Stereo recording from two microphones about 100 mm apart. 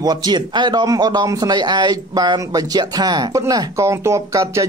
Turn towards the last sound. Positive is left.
turn(degrees=-30)  # may be behind; listen again after turning